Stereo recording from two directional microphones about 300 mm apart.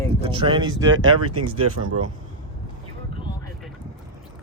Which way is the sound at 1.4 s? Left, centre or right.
Right.